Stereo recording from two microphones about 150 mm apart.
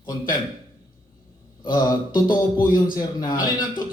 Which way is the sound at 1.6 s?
30° left (ahead or behind).